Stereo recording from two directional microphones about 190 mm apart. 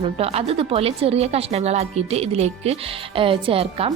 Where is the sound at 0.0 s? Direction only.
30° right (ahead or behind).